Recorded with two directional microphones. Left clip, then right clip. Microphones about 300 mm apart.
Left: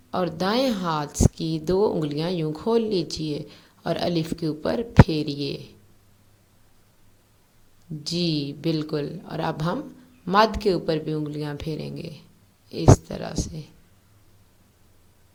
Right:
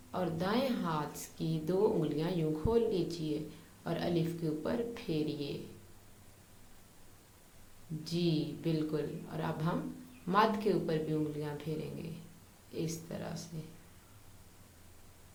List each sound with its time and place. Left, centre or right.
0.1 s a woman's voice: left
8.0 s a woman's voice: left